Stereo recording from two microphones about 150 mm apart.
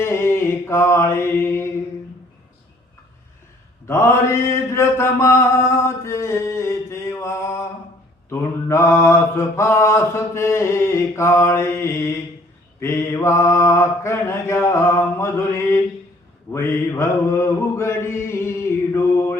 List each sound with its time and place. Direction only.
0.0 s mantra: 15° left (ahead or behind)
3.8 s mantra: 15° left (ahead or behind)